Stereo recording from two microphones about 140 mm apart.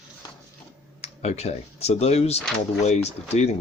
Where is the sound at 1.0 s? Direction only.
50° left (ahead or behind).